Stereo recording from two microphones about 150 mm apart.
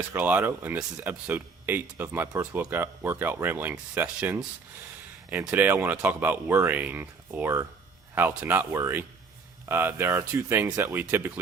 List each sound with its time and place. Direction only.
0.0 s speech: 10° right (ahead or behind)